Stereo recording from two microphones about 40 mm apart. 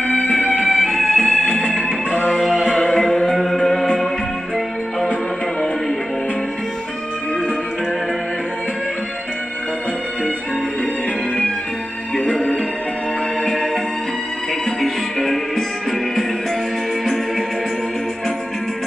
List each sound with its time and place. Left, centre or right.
0.0 s music: centre
0.6 s music: centre
2.5 s music: centre
2.8 s music: centre
12.2 s music: centre
14.8 s music: centre